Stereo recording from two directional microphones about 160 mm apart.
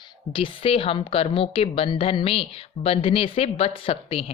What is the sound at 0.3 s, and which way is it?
A woman's voice, 35° left (ahead or behind).